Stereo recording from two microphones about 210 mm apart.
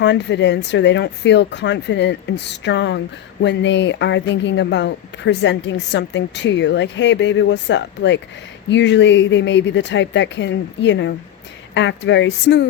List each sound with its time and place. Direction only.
0.0 s speech: 55° left (ahead or behind)